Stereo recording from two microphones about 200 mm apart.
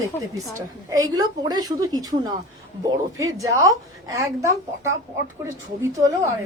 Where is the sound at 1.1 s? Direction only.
20° right (ahead or behind).